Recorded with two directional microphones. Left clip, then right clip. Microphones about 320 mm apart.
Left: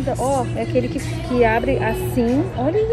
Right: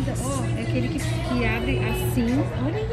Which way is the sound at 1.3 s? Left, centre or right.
Centre.